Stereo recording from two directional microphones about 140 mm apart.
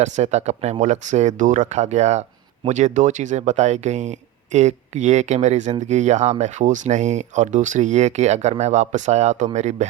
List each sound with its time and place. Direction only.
0.0 s speech: 55° right (ahead or behind)